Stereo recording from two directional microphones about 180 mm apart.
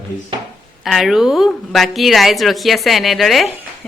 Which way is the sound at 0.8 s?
Centre (ahead or behind).